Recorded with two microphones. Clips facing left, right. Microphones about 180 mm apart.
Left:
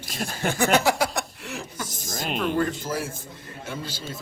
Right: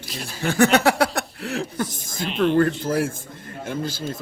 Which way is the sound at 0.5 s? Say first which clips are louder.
Right 5 dB; 60° right (ahead or behind).